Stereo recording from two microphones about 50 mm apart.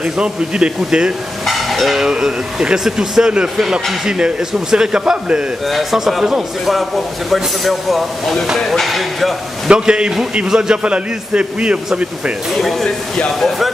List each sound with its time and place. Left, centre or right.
0.0 s speech: centre
1.4 s steam: centre
2.0 s speech: centre
5.7 s speech: centre
9.7 s a man's voice: centre
12.6 s speech: centre